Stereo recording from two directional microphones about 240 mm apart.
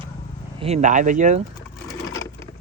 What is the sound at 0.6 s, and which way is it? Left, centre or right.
Speech, right.